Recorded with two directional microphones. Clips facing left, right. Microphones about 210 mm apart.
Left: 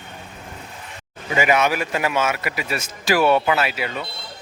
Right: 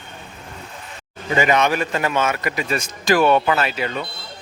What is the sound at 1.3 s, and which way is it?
A man's voice, 10° left (ahead or behind).